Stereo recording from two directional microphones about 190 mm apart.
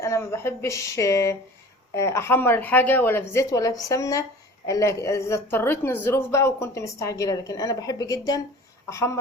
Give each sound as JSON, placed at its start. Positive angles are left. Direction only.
{"t": 0.0, "sound": "a woman's voice", "side_deg": 15}